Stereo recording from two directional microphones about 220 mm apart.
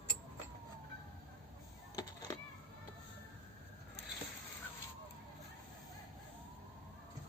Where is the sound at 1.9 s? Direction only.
20° left (ahead or behind).